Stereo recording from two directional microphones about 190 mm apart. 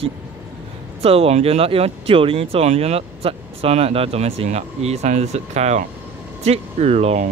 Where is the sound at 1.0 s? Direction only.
30° right (ahead or behind).